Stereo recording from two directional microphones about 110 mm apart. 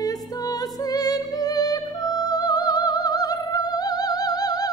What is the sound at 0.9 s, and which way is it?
Music, 35° left (ahead or behind).